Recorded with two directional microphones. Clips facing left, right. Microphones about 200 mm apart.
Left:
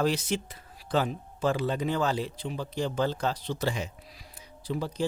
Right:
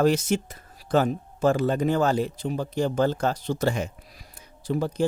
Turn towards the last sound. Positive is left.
turn(degrees=-50)  # may be behind; listen again after turning